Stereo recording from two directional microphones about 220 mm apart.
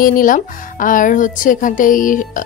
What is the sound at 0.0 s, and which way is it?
Speech, 40° left (ahead or behind).